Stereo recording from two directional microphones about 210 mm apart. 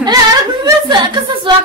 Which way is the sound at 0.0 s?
15° right (ahead or behind).